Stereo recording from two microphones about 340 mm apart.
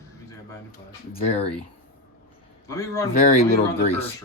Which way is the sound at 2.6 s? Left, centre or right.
Centre.